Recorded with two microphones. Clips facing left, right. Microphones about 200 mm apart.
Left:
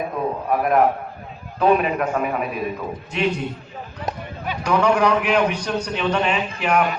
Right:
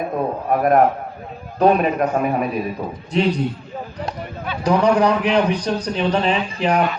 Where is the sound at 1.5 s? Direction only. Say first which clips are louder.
Right 2 dB; 40° right (ahead or behind).